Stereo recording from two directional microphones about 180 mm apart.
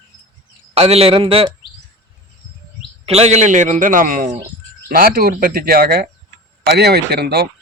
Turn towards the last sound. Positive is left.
turn(degrees=-60)  # may be behind; listen again after turning